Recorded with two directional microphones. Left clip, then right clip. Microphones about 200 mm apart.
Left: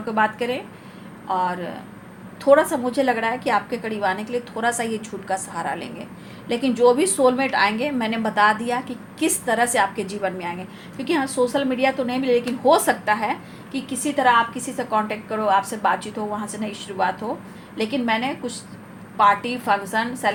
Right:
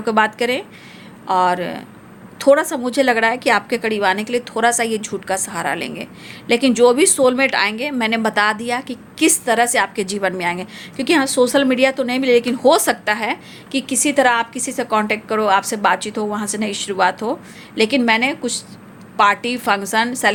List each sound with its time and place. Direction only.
0.0 s a woman's voice: 55° right (ahead or behind)